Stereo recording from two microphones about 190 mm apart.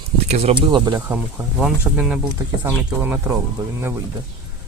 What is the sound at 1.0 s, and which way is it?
Speech, 10° right (ahead or behind).